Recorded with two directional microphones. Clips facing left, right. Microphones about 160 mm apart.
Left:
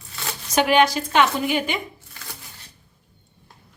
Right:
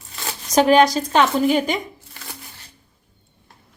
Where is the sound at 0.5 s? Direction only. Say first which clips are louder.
Right 4 dB; 35° right (ahead or behind).